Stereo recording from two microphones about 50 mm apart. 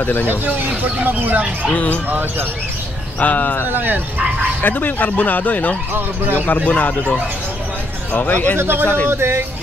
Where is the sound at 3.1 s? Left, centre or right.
Left.